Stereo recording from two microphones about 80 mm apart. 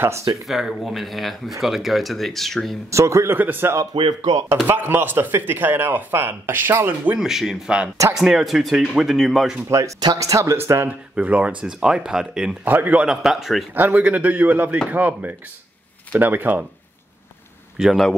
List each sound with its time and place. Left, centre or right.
0.5 s speech: centre
2.9 s speech: right
3.3 s speech: right
3.9 s speech: right
4.6 s speech: right
7.2 s speech: centre
9.7 s speech: right
11.1 s a man's voice: centre
12.6 s a man's voice: right; by 13.7 s centre
13.7 s speech: right
17.7 s a man's voice: centre